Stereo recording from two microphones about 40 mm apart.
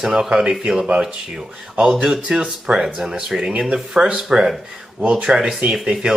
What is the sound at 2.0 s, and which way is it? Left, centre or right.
Speech, centre.